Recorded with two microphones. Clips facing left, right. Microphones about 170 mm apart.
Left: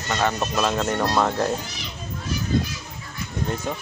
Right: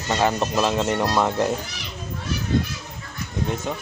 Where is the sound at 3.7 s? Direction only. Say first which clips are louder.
Even; centre (ahead or behind).